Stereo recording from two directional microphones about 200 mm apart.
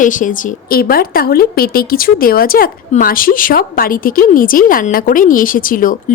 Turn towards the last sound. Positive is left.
turn(degrees=45)  # may be behind; listen again after turning